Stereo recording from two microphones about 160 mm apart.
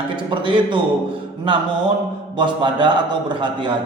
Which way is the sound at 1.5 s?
30° right (ahead or behind).